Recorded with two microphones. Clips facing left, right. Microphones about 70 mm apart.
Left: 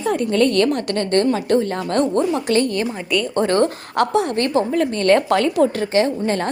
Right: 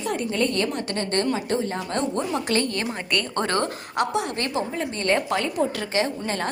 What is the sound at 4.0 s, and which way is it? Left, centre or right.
Speech, left.